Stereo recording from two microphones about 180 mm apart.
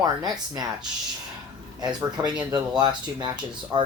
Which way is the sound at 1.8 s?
25° right (ahead or behind).